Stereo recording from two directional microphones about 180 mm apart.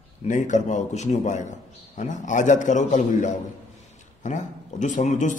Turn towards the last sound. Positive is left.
turn(degrees=45)  # may be behind; listen again after turning